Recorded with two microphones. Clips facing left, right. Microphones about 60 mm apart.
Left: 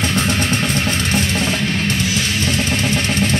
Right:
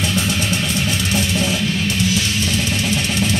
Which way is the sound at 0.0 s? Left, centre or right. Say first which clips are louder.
Left 2 dB; left.